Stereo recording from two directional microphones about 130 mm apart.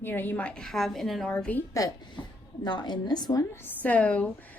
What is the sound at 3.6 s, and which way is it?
Speech, 10° left (ahead or behind).